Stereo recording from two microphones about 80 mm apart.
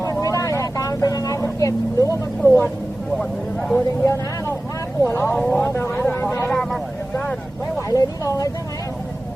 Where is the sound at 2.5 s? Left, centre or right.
Left.